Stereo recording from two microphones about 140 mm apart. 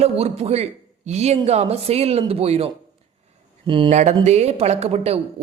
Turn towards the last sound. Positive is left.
turn(degrees=-45)  # may be behind; listen again after turning